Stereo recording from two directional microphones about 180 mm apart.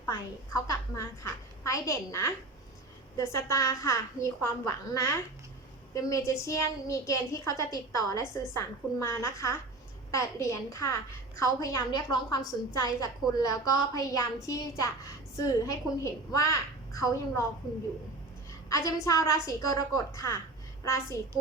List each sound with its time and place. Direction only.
0.0 s a woman's voice: 20° left (ahead or behind)
19.0 s a woman's voice: 20° left (ahead or behind)